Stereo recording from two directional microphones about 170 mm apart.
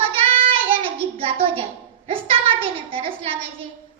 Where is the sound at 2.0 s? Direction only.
35° right (ahead or behind).